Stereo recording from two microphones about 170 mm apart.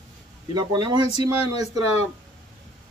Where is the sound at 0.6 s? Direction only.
25° right (ahead or behind).